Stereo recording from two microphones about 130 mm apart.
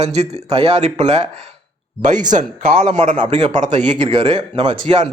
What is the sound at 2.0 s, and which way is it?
A man's voice, 80° right.